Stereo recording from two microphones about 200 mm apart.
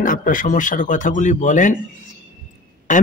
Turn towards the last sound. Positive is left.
turn(degrees=40)  # may be behind; listen again after turning